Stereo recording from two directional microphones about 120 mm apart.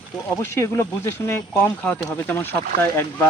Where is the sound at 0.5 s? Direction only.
20° left (ahead or behind).